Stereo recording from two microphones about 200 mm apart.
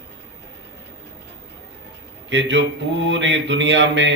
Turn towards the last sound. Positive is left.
turn(degrees=-65)  # may be behind; listen again after turning